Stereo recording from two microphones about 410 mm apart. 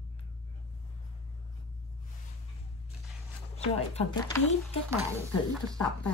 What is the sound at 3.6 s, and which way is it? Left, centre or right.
Speech, centre.